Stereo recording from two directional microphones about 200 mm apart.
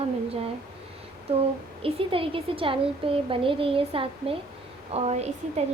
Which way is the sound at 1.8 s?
25° right (ahead or behind).